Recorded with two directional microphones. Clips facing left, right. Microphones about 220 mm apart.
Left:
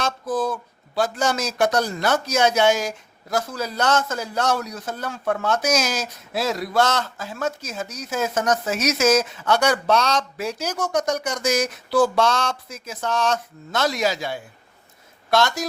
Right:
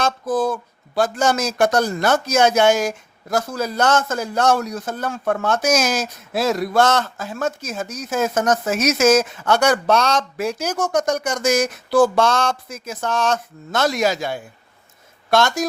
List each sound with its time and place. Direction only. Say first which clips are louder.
0.0 s a man's voice: right 4 dB; 50° right (ahead or behind)